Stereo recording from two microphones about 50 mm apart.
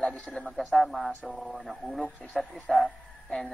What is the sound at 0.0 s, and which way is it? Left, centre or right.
Speech, left.